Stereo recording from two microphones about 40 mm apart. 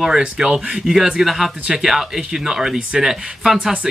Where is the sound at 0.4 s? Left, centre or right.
Centre.